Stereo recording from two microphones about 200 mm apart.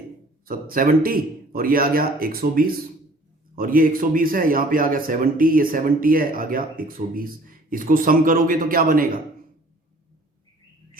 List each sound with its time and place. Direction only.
0.4 s a man's voice: 45° right (ahead or behind)